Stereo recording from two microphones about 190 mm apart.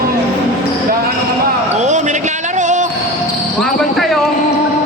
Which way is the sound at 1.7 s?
40° right (ahead or behind).